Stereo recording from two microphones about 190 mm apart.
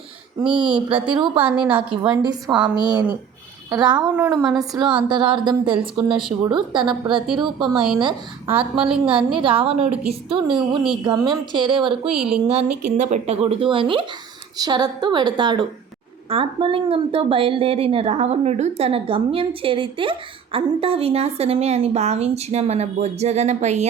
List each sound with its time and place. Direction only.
0.4 s a woman's voice: 25° right (ahead or behind)
2.5 s a woman's voice: 5° right (ahead or behind)
2.8 s a woman's voice: 20° right (ahead or behind)
4.1 s a woman's voice: 10° right (ahead or behind)
4.4 s a woman's voice: 20° right (ahead or behind)
12.1 s a woman's voice: centre (ahead or behind)
12.5 s a woman's voice: 35° right (ahead or behind)